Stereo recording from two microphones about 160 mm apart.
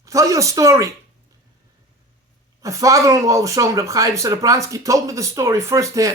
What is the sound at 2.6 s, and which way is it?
Speech, 20° right (ahead or behind).